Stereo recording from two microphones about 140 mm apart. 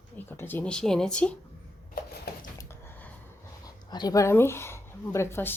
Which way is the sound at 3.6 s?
30° left (ahead or behind).